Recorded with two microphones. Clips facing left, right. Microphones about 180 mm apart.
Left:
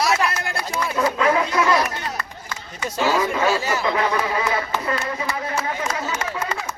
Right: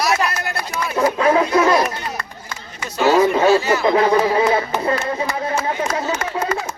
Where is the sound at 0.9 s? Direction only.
30° right (ahead or behind).